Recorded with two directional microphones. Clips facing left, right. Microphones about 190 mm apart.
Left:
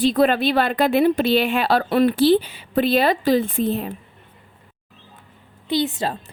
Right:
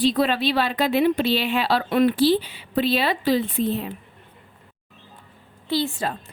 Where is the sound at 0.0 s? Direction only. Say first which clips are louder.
Left 3 dB; 50° left (ahead or behind).